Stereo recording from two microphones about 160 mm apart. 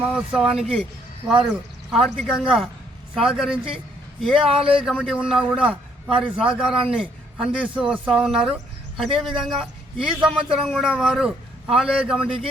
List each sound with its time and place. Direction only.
0.1 s a man's voice: 5° right (ahead or behind)
1.2 s speech: 25° right (ahead or behind)
1.9 s a man's voice: centre (ahead or behind)